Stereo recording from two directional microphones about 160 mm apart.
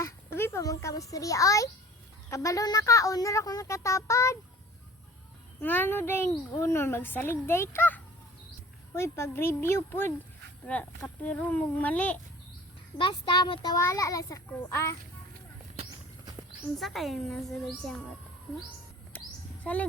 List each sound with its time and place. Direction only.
0.0 s a sound: 15° left (ahead or behind)
2.3 s speech: 20° left (ahead or behind)
5.5 s a child's voice: 10° left (ahead or behind)
13.0 s speech: 30° left (ahead or behind)
16.8 s speech: centre (ahead or behind)
19.6 s a child's voice: 10° left (ahead or behind)